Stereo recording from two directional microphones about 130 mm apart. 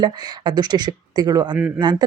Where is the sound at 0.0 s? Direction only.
30° right (ahead or behind).